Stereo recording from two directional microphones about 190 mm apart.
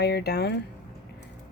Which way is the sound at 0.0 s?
60° left (ahead or behind).